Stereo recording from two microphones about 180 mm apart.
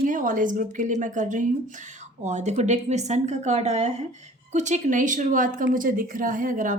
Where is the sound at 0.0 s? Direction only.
50° right (ahead or behind).